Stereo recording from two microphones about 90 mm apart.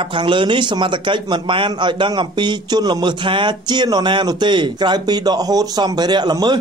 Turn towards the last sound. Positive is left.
turn(degrees=-50)  # may be behind; listen again after turning